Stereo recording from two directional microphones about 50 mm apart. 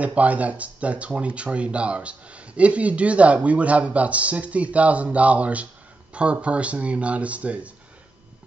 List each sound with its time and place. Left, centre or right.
0.0 s speech: right